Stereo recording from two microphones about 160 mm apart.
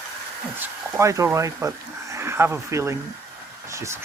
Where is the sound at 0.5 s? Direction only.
20° right (ahead or behind).